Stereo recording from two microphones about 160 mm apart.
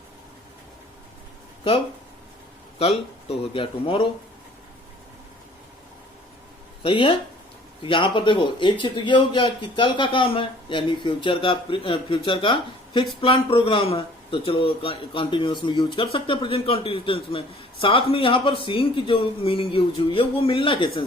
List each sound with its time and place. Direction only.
3.2 s speech: 35° left (ahead or behind)
6.8 s speech: 35° left (ahead or behind)